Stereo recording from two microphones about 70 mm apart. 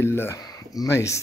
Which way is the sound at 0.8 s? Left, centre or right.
Left.